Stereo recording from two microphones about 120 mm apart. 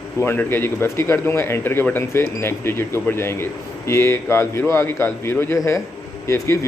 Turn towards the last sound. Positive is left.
turn(degrees=25)  # may be behind; listen again after turning